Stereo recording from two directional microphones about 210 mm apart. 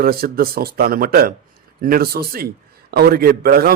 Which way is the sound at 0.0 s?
45° right (ahead or behind).